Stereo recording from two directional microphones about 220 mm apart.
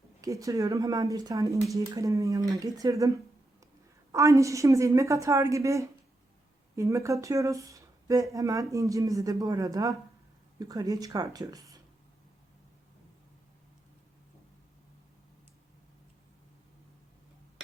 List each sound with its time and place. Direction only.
0.2 s speech: 15° right (ahead or behind)
4.1 s speech: 15° right (ahead or behind)